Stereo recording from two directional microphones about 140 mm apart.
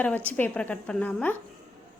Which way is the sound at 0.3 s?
10° left (ahead or behind).